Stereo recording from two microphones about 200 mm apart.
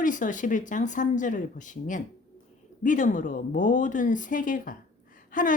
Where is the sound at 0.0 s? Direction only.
40° left (ahead or behind).